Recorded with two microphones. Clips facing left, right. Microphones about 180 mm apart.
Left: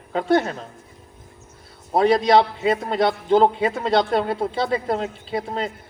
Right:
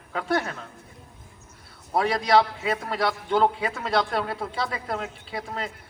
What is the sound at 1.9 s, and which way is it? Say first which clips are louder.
A man's voice: left 5 dB; 25° left (ahead or behind).